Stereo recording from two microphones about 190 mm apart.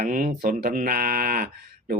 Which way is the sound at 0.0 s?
50° right (ahead or behind).